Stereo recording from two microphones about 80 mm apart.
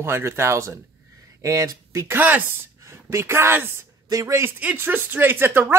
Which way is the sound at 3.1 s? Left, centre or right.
Right.